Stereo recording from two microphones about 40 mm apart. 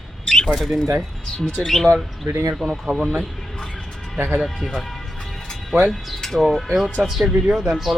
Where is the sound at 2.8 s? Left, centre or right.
Centre.